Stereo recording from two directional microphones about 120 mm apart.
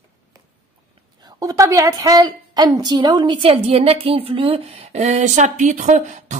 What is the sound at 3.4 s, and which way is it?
Speech, 50° right (ahead or behind).